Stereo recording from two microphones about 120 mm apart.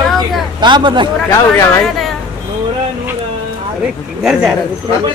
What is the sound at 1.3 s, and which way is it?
Speech, 20° left (ahead or behind).